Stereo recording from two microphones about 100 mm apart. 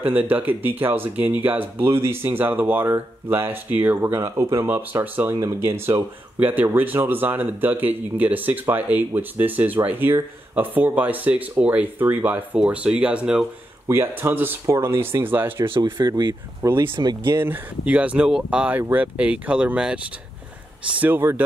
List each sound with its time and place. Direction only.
0.0 s speech: 15° right (ahead or behind)
13.8 s speech: 25° right (ahead or behind)
15.6 s speech: 50° right (ahead or behind)
17.4 s speech: 15° right (ahead or behind)